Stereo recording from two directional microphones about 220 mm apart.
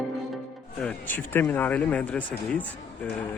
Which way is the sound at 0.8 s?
10° left (ahead or behind).